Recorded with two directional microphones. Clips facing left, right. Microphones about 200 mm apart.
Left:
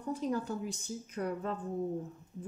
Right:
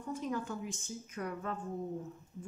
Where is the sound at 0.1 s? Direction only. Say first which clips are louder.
Left 3 dB; 35° left (ahead or behind).